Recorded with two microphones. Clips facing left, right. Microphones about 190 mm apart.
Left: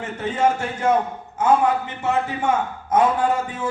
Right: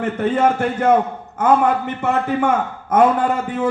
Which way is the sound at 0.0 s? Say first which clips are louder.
Right 4 dB; 55° right (ahead or behind).